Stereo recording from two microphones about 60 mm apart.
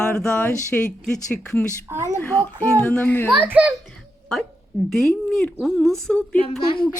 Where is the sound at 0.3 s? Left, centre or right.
Left.